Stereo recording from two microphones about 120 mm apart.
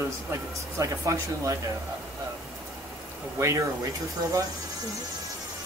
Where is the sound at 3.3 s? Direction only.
25° right (ahead or behind).